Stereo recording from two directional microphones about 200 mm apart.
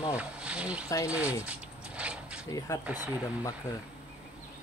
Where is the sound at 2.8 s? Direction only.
10° right (ahead or behind).